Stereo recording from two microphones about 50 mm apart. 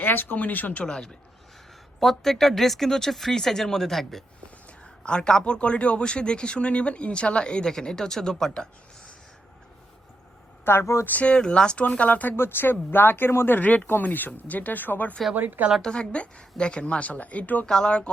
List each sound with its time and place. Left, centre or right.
0.0 s speech: left
0.9 s speech: centre
4.8 s speech: centre
10.7 s a woman's voice: left
11.0 s speech: left
11.3 s speech: centre
12.4 s speech: left
13.7 s speech: left
15.4 s a woman's voice: right
15.8 s speech: centre; by 17.7 s left
17.7 s speech: centre